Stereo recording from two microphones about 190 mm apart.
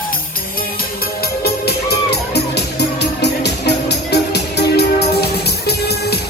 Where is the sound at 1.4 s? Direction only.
55° left (ahead or behind).